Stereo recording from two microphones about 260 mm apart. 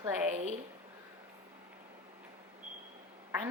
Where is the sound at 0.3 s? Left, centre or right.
Right.